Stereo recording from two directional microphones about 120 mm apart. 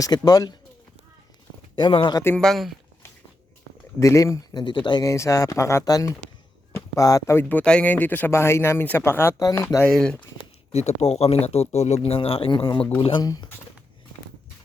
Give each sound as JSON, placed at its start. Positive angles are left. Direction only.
{"t": 0.3, "sound": "speech", "side_deg": 35}
{"t": 1.7, "sound": "speech", "side_deg": 45}
{"t": 2.4, "sound": "speech", "side_deg": 0}
{"t": 4.0, "sound": "speech", "side_deg": 25}
{"t": 4.6, "sound": "speech", "side_deg": 40}
{"t": 5.0, "sound": "speech", "side_deg": 25}
{"t": 9.4, "sound": "speech", "side_deg": 30}
{"t": 9.6, "sound": "speech", "side_deg": 15}
{"t": 10.7, "sound": "speech", "side_deg": 60}
{"t": 13.2, "sound": "speech", "side_deg": 30}